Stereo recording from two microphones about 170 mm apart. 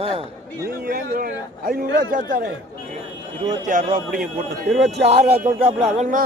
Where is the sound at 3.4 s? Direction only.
50° right (ahead or behind).